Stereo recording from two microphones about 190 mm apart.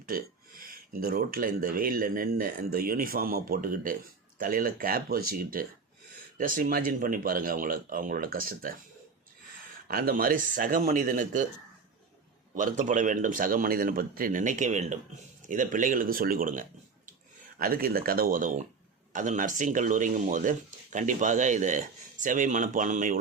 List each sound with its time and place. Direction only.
0.0 s speech: 50° right (ahead or behind)
9.9 s speech: 50° right (ahead or behind)
12.5 s speech: 45° right (ahead or behind)